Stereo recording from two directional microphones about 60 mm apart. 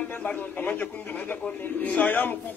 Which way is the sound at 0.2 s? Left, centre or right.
Left.